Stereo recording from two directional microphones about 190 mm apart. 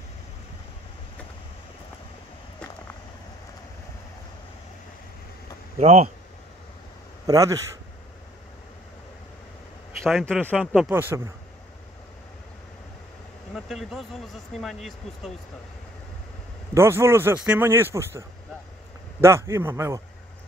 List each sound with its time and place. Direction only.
5.8 s speech: 35° right (ahead or behind)
7.2 s speech: 15° right (ahead or behind)
10.0 s speech: centre (ahead or behind)
13.6 s speech: centre (ahead or behind)
16.7 s speech: 15° right (ahead or behind)
19.2 s speech: 15° right (ahead or behind)